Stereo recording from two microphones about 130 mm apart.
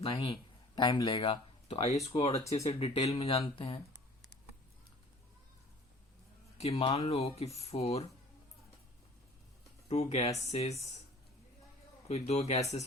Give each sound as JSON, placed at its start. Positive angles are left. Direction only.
{"t": 0.0, "sound": "speech", "side_deg": 45}
{"t": 0.8, "sound": "speech", "side_deg": 35}
{"t": 3.4, "sound": "speech", "side_deg": 40}
{"t": 6.6, "sound": "speech", "side_deg": 50}
{"t": 9.9, "sound": "a man's voice", "side_deg": 60}
{"t": 12.0, "sound": "a man's voice", "side_deg": 60}